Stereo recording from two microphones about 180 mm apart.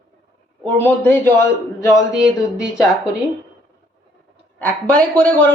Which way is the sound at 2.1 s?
5° right (ahead or behind).